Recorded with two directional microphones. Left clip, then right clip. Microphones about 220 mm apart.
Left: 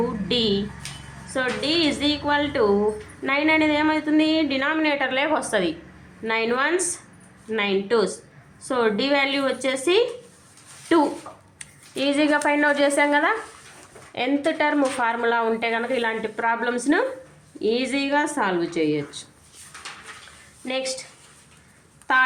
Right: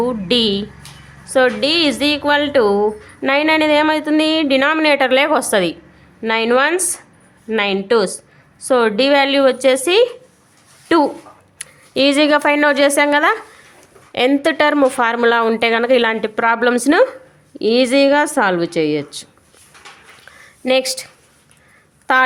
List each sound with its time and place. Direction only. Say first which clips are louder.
0.3 s a woman's voice: right 6 dB; 45° right (ahead or behind)
20.7 s speech: right 11 dB; 50° right (ahead or behind)
22.1 s speech: right 6 dB; 50° right (ahead or behind)